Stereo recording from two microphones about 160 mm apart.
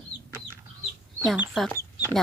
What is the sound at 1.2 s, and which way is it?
Speech, 5° right (ahead or behind).